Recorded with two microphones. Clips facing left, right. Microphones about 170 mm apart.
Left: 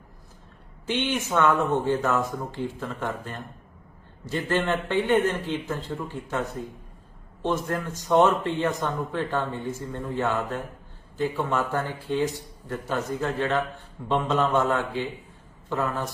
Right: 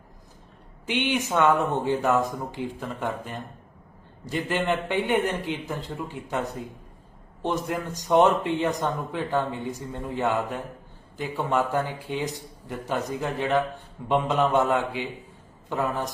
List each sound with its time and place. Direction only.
0.9 s speech: 15° right (ahead or behind)